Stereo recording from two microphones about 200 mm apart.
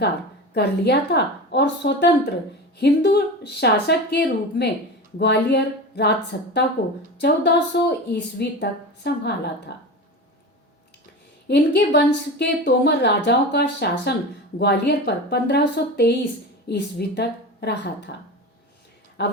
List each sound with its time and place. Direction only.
0.5 s a woman's voice: 55° left (ahead or behind)
11.4 s a woman's voice: 60° left (ahead or behind)
19.2 s speech: 55° left (ahead or behind)